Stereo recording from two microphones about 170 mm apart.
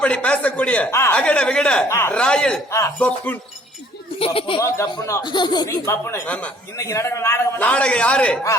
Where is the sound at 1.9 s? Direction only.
15° left (ahead or behind).